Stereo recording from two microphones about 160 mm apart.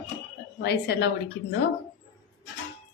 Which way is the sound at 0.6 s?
90° left.